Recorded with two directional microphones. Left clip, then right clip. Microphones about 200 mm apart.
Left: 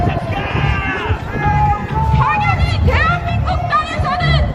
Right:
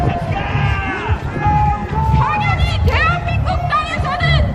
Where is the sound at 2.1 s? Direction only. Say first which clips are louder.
Left 2 dB; 10° right (ahead or behind).